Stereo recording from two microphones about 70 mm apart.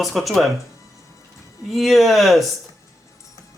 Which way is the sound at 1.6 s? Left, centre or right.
Centre.